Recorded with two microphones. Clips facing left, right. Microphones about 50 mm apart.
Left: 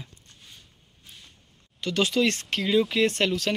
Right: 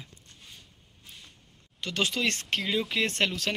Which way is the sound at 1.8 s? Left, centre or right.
Centre.